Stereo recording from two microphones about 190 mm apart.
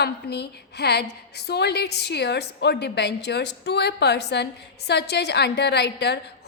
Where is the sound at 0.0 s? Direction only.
60° left (ahead or behind).